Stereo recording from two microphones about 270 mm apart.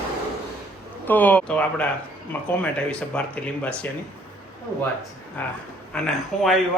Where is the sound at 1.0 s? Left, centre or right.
Centre.